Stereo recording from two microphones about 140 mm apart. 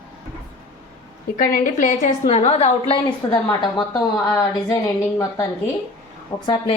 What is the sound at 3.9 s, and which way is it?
Speech, 20° left (ahead or behind).